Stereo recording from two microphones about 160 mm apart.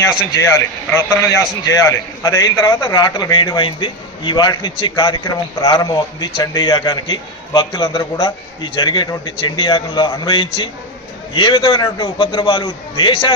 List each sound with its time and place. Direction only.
0.9 s a man's voice: 15° left (ahead or behind)